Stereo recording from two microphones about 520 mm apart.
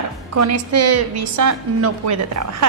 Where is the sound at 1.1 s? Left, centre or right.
Right.